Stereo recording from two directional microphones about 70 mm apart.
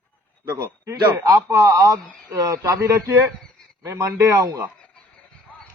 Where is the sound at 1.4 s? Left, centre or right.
Right.